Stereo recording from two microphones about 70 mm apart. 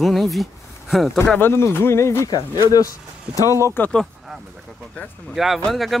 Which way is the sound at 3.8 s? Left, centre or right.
Left.